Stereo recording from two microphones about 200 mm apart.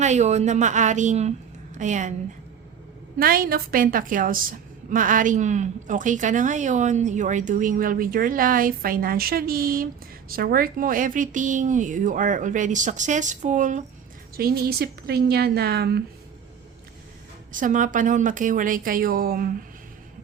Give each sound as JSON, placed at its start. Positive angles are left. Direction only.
{"t": 0.0, "sound": "a woman's voice", "side_deg": -35}
{"t": 3.2, "sound": "a woman's voice", "side_deg": -45}
{"t": 17.5, "sound": "a woman's voice", "side_deg": -40}